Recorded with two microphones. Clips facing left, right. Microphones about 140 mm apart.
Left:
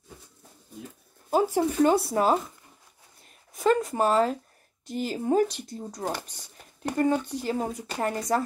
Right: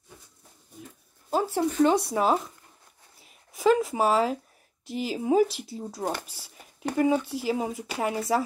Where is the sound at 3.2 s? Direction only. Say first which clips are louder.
Right 1 dB; 5° right (ahead or behind).